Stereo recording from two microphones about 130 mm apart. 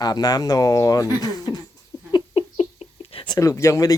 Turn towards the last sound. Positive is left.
turn(degrees=25)  # may be behind; listen again after turning